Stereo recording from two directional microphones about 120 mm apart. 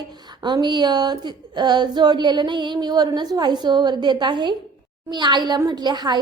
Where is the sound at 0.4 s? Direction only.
40° right (ahead or behind).